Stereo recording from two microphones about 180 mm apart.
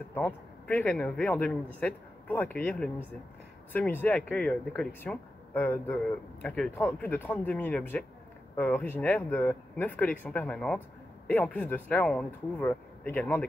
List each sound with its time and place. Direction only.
0.1 s speech: 10° left (ahead or behind)